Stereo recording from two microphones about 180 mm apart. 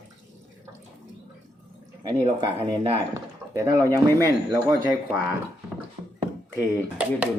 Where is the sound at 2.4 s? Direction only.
35° right (ahead or behind).